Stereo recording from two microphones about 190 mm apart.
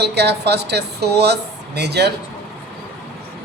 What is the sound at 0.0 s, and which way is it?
Speech, 60° right (ahead or behind).